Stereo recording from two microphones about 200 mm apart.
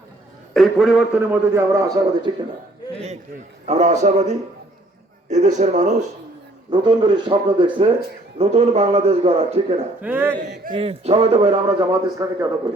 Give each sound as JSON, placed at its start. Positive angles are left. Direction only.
{"t": 0.5, "sound": "a man's voice", "side_deg": 0}
{"t": 3.7, "sound": "a man's voice", "side_deg": -35}
{"t": 6.7, "sound": "a man's voice", "side_deg": -20}
{"t": 10.0, "sound": "a man's voice", "side_deg": -10}
{"t": 10.7, "sound": "a man's voice", "side_deg": -30}